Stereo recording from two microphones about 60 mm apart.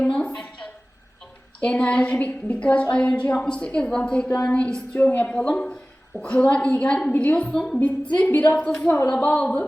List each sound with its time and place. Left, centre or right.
0.0 s a sound: centre
1.6 s a woman's voice: centre
7.5 s a woman's voice: centre
7.8 s a woman's voice: left